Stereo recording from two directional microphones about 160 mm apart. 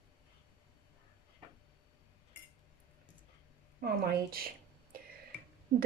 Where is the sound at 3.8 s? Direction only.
80° right.